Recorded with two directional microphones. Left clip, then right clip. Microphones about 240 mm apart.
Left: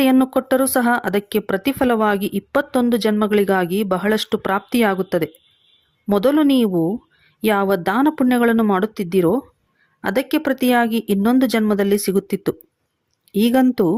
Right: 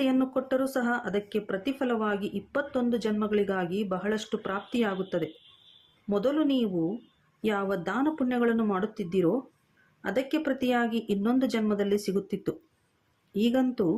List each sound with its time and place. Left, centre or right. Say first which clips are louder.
0.0 s speech: left 11 dB; left